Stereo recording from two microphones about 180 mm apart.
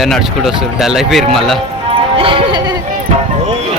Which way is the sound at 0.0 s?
Centre (ahead or behind).